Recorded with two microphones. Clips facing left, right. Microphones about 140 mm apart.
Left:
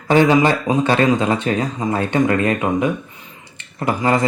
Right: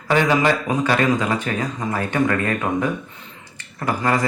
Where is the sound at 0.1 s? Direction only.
30° left (ahead or behind).